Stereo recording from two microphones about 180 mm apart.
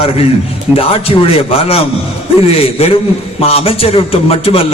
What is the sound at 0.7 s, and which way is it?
Speech, 5° right (ahead or behind).